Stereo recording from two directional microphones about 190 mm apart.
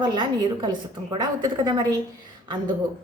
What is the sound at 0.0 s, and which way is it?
A woman's voice, 20° right (ahead or behind).